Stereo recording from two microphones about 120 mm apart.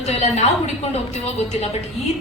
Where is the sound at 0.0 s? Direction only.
65° left (ahead or behind).